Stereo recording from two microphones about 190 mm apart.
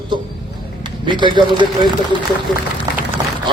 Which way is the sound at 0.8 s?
25° right (ahead or behind).